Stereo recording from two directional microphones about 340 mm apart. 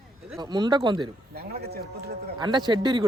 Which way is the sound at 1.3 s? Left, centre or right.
Right.